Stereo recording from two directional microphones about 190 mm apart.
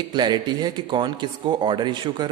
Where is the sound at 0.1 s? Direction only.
25° right (ahead or behind).